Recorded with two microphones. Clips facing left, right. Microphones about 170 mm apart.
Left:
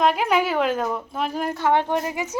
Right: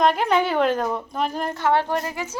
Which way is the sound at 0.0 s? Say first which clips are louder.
Right 1 dB; 5° left (ahead or behind).